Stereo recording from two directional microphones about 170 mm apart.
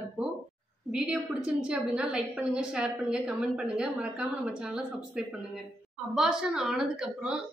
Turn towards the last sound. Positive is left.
turn(degrees=-5)  # may be behind; listen again after turning